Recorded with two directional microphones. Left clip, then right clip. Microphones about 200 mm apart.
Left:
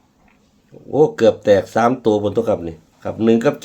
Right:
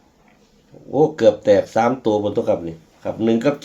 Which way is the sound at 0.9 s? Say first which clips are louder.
Left 1 dB; 40° left (ahead or behind).